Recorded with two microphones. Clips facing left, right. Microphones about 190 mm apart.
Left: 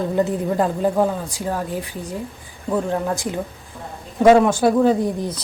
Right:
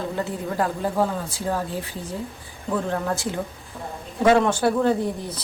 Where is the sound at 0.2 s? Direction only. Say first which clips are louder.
Left 7 dB; 20° left (ahead or behind).